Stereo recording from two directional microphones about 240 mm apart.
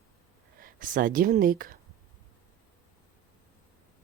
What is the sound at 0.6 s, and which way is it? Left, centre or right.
Speech, right.